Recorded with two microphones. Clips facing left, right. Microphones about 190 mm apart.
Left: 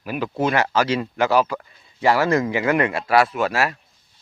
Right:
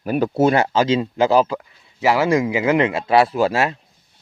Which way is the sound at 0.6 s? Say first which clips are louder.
Right 3 dB; 20° right (ahead or behind).